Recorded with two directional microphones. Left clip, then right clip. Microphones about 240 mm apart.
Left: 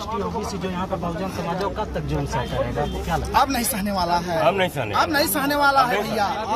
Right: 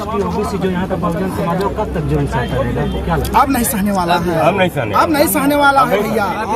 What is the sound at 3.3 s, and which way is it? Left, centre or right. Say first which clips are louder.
Speech: right 7 dB; centre.